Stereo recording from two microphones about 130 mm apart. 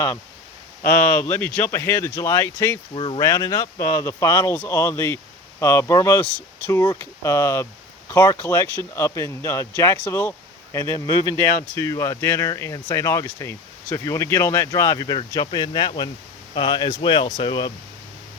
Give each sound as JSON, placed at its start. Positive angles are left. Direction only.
{"t": 1.0, "sound": "speech", "side_deg": 15}
{"t": 2.9, "sound": "speech", "side_deg": 40}
{"t": 3.2, "sound": "speech", "side_deg": 25}